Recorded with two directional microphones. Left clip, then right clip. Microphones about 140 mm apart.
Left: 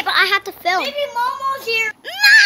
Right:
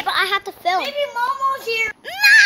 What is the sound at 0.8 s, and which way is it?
Speech, centre (ahead or behind).